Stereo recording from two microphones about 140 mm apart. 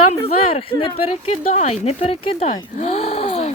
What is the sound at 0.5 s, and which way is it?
Speech, 40° left (ahead or behind).